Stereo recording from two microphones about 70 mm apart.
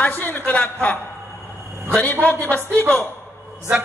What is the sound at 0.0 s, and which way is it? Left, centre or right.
Speech, left.